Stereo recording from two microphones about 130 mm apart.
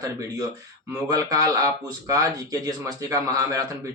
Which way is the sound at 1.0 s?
30° right (ahead or behind).